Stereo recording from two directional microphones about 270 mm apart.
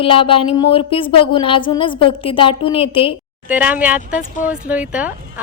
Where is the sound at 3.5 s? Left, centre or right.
Centre.